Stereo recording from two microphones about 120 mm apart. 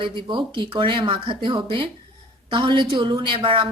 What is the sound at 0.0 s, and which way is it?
Speech, 45° right (ahead or behind).